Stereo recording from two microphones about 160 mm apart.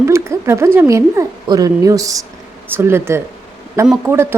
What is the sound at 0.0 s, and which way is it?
A woman's voice, 15° right (ahead or behind).